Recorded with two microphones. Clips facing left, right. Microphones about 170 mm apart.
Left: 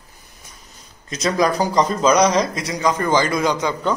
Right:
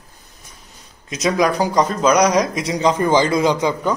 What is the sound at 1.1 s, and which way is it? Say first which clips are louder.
A man's voice: right 1 dB; 5° right (ahead or behind).